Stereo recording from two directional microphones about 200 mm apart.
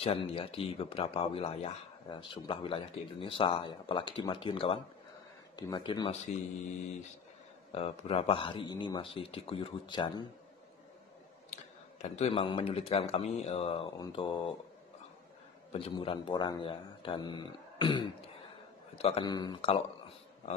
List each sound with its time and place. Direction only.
0.0 s speech: 30° left (ahead or behind)
7.7 s speech: 30° left (ahead or behind)
11.5 s speech: 35° left (ahead or behind)
15.7 s speech: 25° left (ahead or behind)